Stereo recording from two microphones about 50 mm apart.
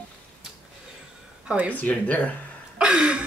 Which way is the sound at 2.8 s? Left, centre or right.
Centre.